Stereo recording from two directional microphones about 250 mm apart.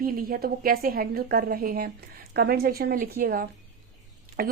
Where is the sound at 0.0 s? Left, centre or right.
Right.